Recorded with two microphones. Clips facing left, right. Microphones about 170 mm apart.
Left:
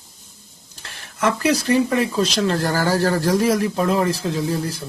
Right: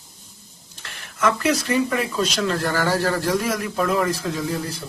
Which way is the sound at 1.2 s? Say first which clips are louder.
Left 1 dB; 30° left (ahead or behind).